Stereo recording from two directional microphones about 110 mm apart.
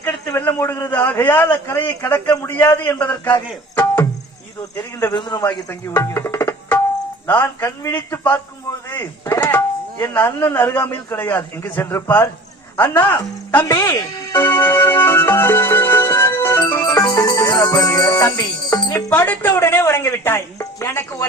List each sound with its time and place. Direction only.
0.3 s a man's voice: 20° left (ahead or behind)
5.1 s a man's voice: 40° left (ahead or behind)
5.9 s music: 25° left (ahead or behind)
7.3 s speech: 20° left (ahead or behind)
13.7 s speech: 30° left (ahead or behind)
16.8 s music: 35° left (ahead or behind)
19.1 s speech: 15° left (ahead or behind)